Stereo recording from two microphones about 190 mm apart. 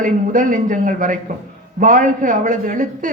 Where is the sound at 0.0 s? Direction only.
45° right (ahead or behind).